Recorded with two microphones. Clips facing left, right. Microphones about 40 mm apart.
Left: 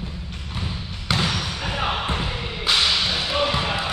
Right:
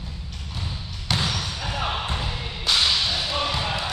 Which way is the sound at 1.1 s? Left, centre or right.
Left.